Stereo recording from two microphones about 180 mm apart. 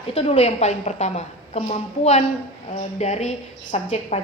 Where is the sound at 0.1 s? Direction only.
35° left (ahead or behind).